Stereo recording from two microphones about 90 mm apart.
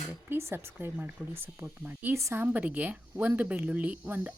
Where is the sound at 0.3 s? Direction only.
25° right (ahead or behind).